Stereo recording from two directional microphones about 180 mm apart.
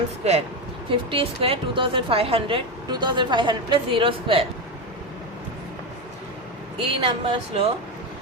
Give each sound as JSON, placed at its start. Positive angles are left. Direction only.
{"t": 0.9, "sound": "a woman's voice", "side_deg": -30}
{"t": 6.8, "sound": "speech", "side_deg": -30}